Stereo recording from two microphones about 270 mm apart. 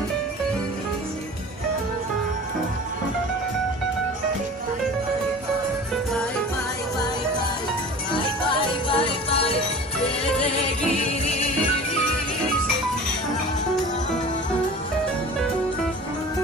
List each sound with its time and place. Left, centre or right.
8.5 s music: centre